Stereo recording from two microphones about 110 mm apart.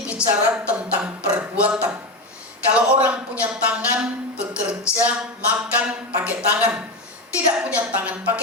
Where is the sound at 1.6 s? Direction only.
10° right (ahead or behind).